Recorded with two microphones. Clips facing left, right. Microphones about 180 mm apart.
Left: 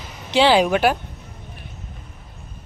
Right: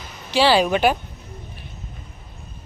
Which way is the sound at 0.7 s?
5° left (ahead or behind).